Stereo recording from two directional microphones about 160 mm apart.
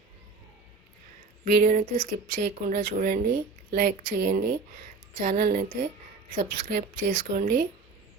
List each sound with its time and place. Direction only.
1.5 s speech: 60° right (ahead or behind)